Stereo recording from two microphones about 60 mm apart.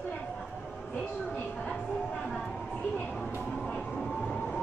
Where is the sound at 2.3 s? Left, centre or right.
Centre.